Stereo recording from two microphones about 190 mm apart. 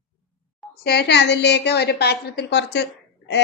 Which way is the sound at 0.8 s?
60° left (ahead or behind).